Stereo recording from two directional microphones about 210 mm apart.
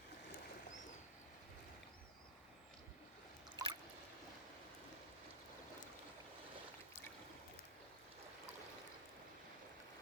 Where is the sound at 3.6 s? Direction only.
20° right (ahead or behind).